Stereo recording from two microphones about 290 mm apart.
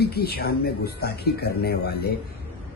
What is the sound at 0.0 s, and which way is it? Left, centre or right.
Speech, left.